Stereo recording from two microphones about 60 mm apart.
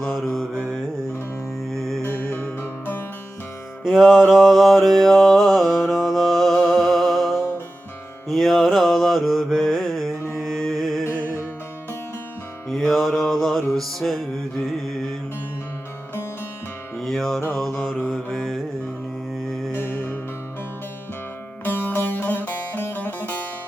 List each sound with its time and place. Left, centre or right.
0.0 s mantra: centre
1.7 s music: centre
2.3 s music: left
3.8 s mantra: centre
10.3 s music: centre
12.6 s music: centre
17.0 s music: centre
17.6 s mantra: centre
19.7 s music: left
21.6 s music: left